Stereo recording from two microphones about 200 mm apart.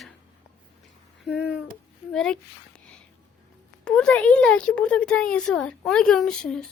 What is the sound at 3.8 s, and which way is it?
Speech, 5° left (ahead or behind).